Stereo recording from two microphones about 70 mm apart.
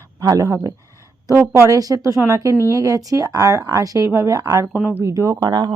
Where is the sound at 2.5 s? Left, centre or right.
Left.